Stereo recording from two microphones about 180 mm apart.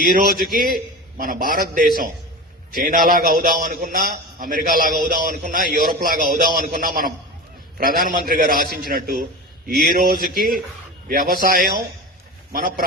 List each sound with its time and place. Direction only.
0.0 s a man's voice: 50° right (ahead or behind)